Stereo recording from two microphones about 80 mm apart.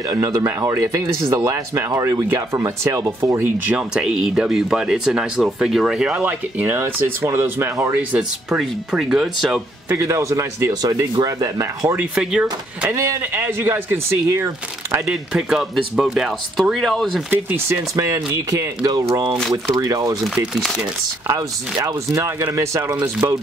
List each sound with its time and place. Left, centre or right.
0.1 s speech: right
3.6 s speech: centre
6.2 s speech: right
7.9 s speech: centre
9.9 s speech: right
10.7 s speech: right
12.2 s speech: centre
12.9 s speech: right
13.3 s speech: right
15.0 s speech: centre
17.3 s speech: right
17.9 s speech: right
21.4 s speech: right
22.4 s speech: right